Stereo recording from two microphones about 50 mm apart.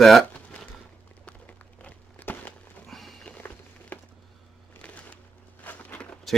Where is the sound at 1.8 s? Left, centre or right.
Left.